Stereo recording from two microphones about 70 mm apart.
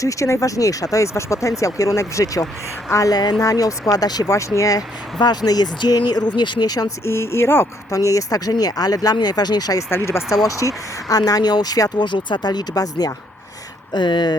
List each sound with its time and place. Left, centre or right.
0.0 s speech: left
3.4 s speech: left
4.3 s speech: left
5.2 s speech: left
6.8 s speech: left
7.9 s speech: left
10.1 s speech: left
10.4 s speech: left
13.9 s speech: left